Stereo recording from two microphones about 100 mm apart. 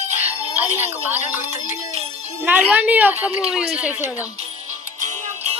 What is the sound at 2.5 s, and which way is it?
Speech, 15° right (ahead or behind).